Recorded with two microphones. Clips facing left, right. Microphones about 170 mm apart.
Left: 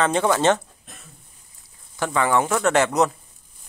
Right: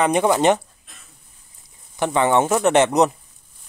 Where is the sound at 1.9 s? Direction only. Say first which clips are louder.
Right 3 dB; 20° right (ahead or behind).